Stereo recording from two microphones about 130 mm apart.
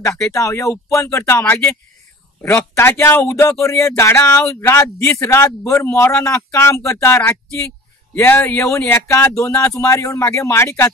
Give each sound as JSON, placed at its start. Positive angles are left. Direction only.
{"t": 0.3, "sound": "speech", "side_deg": 25}